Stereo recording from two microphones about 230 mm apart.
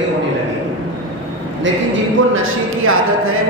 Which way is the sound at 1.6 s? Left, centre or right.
Right.